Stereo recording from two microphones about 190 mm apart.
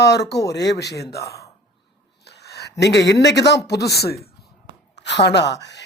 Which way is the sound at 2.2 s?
60° left (ahead or behind).